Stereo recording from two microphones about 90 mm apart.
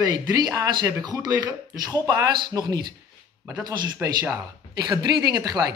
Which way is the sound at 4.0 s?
20° right (ahead or behind).